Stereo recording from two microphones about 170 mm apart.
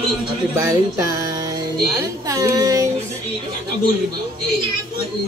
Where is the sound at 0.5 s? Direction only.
20° right (ahead or behind).